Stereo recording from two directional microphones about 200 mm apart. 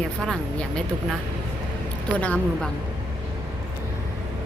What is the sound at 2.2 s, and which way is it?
Speech, 5° left (ahead or behind).